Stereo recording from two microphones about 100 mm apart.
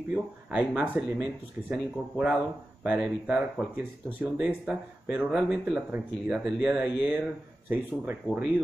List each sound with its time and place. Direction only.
0.1 s speech: 10° right (ahead or behind)